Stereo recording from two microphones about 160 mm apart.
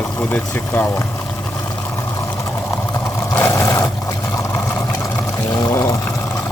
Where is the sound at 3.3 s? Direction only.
15° left (ahead or behind).